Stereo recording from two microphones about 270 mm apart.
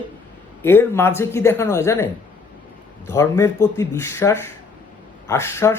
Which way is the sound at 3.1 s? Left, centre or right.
Centre.